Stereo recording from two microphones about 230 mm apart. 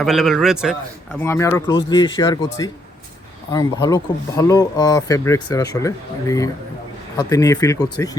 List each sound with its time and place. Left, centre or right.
0.0 s a man's voice: centre
1.2 s speech: centre